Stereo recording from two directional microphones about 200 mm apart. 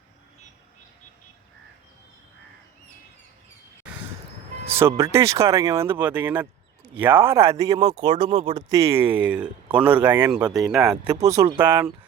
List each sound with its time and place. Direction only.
4.7 s speech: 15° right (ahead or behind)
8.7 s speech: 15° right (ahead or behind)
10.5 s speech: centre (ahead or behind)
11.0 s speech: 15° right (ahead or behind)